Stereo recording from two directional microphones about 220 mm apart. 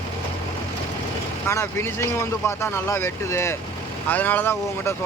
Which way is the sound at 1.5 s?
10° left (ahead or behind).